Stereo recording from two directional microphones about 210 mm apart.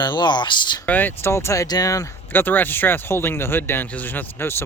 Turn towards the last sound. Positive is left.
turn(degrees=10)  # may be behind; listen again after turning